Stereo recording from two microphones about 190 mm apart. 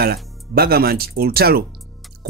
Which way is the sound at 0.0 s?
55° right (ahead or behind).